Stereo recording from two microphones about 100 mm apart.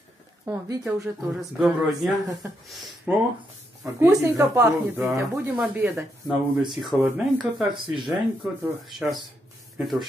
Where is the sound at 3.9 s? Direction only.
30° right (ahead or behind).